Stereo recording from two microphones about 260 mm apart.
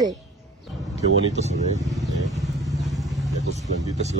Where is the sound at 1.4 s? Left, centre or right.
Right.